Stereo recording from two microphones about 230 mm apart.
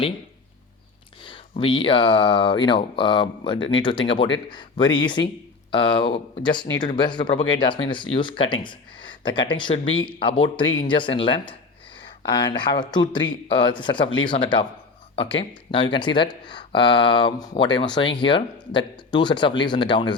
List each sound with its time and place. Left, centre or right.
1.2 s speech: left